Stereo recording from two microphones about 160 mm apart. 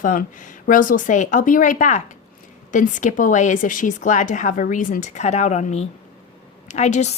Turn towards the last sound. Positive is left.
turn(degrees=45)  # may be behind; listen again after turning